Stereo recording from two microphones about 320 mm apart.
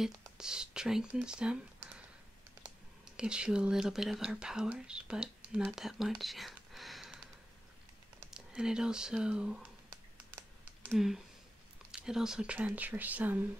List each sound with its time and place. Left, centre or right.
0.0 s speech: centre
3.2 s speech: centre
8.2 s speech: centre
10.8 s speech: centre